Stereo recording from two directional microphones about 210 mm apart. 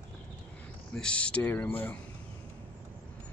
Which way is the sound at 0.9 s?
5° left (ahead or behind).